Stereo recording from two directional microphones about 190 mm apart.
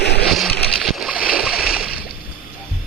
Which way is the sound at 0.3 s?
Centre (ahead or behind).